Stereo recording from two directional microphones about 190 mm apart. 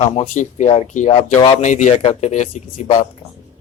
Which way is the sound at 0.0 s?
35° left (ahead or behind).